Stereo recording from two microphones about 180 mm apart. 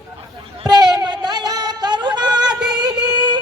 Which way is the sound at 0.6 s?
20° right (ahead or behind).